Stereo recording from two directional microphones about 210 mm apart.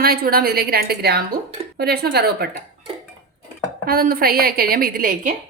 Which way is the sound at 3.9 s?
45° right (ahead or behind).